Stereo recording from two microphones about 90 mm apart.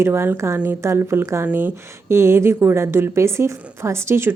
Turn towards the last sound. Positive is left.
turn(degrees=-30)  # may be behind; listen again after turning